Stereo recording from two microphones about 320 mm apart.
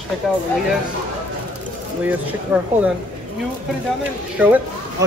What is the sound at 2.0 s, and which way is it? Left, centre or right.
Speech, centre.